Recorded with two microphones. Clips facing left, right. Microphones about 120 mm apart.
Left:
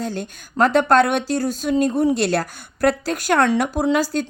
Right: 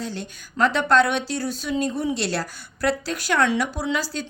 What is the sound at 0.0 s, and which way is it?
Speech, 50° left (ahead or behind).